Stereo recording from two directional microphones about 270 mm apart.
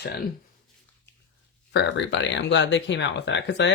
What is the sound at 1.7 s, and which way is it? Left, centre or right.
Speech, left.